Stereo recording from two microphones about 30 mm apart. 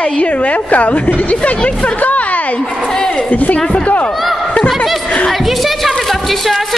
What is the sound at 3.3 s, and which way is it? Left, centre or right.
Speech, left.